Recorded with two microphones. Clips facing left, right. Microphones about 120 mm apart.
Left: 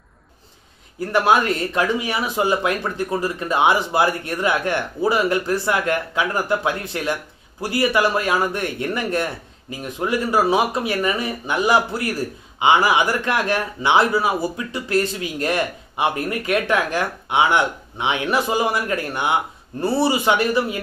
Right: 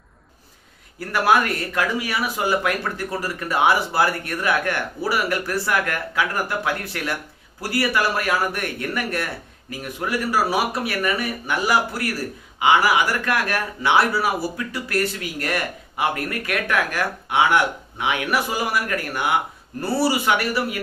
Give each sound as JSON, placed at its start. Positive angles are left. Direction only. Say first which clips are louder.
{"t": 0.9, "sound": "a man's voice", "louder": "left 2 dB", "side_deg": 20}